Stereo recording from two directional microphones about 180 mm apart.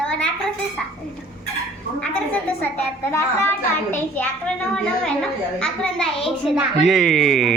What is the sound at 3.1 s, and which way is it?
A child's voice, 15° left (ahead or behind).